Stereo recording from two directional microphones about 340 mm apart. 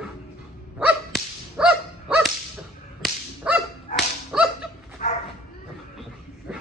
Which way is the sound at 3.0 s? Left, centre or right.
Centre.